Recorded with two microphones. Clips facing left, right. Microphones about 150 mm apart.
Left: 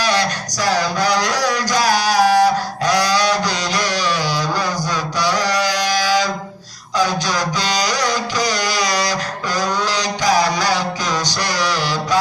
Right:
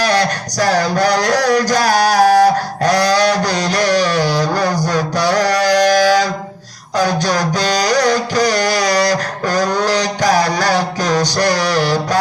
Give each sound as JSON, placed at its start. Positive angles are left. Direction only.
{"t": 0.6, "sound": "music", "side_deg": -55}